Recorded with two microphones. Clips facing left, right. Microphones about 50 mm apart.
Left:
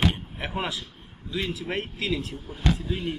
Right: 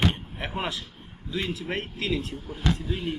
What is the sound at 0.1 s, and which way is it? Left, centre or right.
Door, centre.